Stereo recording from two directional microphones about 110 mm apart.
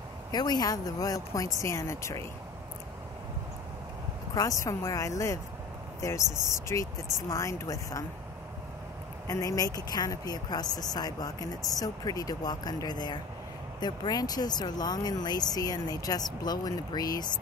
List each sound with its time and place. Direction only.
0.3 s speech: 40° left (ahead or behind)
4.4 s speech: 30° left (ahead or behind)
9.3 s speech: 30° left (ahead or behind)